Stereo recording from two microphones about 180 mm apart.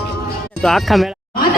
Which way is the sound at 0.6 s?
Centre (ahead or behind).